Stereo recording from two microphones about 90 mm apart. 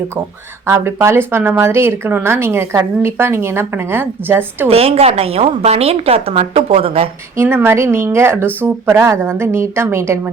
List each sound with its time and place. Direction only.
0.7 s a woman's voice: 30° right (ahead or behind)
4.7 s a woman's voice: 90° right
7.3 s a woman's voice: 25° right (ahead or behind)